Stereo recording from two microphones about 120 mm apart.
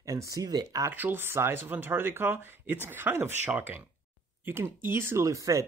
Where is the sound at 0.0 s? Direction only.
25° right (ahead or behind).